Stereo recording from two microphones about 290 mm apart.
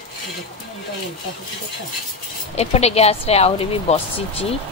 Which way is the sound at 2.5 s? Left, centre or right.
Left.